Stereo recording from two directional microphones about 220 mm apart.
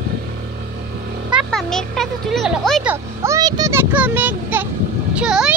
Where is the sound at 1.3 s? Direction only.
Centre (ahead or behind).